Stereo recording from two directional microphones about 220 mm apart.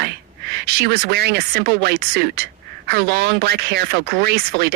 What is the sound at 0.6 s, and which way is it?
A man's voice, 45° right (ahead or behind).